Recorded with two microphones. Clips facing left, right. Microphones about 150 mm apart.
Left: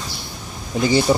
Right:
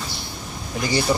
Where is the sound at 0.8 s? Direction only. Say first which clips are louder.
Left 6 dB; 20° left (ahead or behind).